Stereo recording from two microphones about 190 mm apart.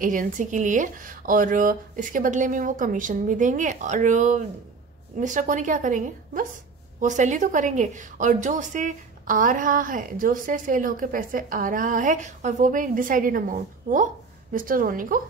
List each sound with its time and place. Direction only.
0.0 s a woman's voice: 45° right (ahead or behind)